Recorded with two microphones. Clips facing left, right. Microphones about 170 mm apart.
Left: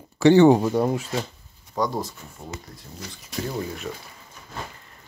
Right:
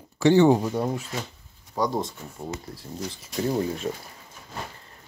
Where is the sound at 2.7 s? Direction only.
30° right (ahead or behind).